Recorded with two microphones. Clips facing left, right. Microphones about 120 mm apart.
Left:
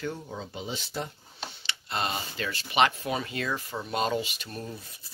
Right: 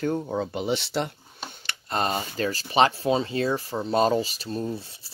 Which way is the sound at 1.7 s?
40° right (ahead or behind).